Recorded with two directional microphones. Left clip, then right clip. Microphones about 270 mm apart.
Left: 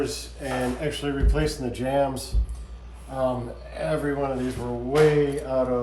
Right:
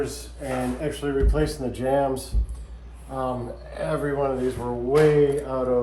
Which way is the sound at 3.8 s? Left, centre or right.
Centre.